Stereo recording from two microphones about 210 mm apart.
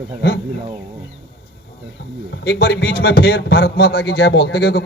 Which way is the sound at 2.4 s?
50° left (ahead or behind).